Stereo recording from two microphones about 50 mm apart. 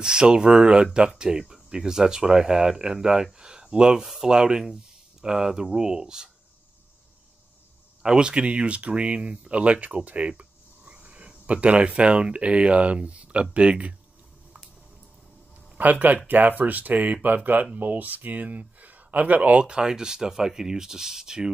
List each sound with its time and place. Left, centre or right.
0.0 s speech: centre
8.0 s speech: centre
15.8 s speech: right
19.6 s speech: centre